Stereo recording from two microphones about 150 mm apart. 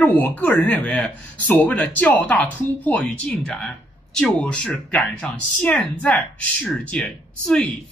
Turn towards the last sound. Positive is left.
turn(degrees=5)  # may be behind; listen again after turning